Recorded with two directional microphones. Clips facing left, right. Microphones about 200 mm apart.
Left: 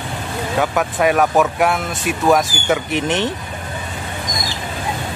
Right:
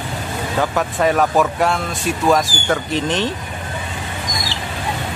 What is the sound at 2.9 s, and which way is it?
Speech, 20° left (ahead or behind).